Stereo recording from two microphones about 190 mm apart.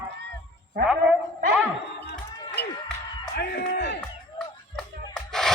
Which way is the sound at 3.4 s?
55° left (ahead or behind).